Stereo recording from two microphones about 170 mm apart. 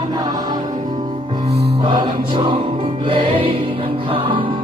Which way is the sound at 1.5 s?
70° right (ahead or behind).